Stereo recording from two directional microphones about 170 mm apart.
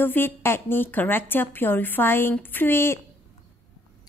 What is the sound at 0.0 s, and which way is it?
A woman's voice, 10° left (ahead or behind).